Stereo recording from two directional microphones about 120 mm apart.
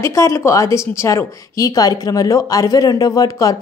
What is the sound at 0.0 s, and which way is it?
Speech, 25° left (ahead or behind).